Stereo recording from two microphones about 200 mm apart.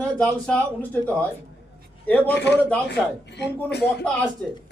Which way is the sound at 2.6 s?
5° left (ahead or behind).